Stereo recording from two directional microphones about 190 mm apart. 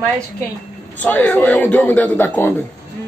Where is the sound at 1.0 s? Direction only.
10° left (ahead or behind).